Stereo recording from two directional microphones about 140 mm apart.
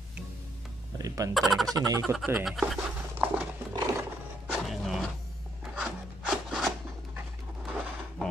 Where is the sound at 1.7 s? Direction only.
25° right (ahead or behind).